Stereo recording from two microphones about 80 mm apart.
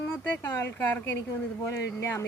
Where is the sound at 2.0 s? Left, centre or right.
Left.